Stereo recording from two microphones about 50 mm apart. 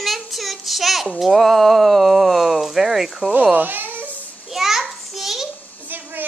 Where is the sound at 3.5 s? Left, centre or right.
Right.